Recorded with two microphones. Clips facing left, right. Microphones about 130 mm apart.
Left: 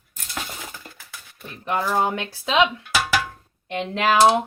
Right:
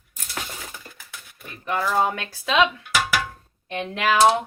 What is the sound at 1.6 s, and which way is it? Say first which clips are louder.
Speech: even; 20° left (ahead or behind).